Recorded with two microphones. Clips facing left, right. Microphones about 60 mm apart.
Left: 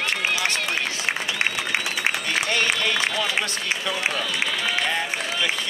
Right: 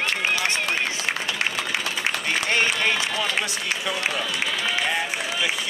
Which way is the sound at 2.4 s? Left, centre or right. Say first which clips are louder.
Right 3 dB; centre.